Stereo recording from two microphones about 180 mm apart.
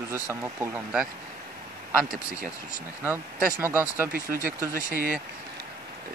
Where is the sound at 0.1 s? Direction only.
15° right (ahead or behind).